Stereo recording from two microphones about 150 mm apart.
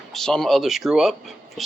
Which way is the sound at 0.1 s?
5° left (ahead or behind).